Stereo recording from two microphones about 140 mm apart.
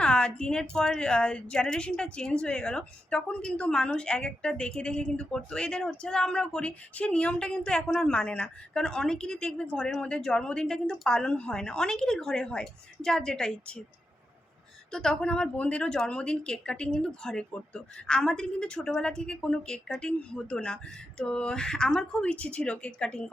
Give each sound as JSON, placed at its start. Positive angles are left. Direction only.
{"t": 0.0, "sound": "speech", "side_deg": 5}
{"t": 14.9, "sound": "speech", "side_deg": 5}